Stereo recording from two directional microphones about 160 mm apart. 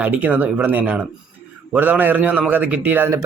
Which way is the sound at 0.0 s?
10° right (ahead or behind).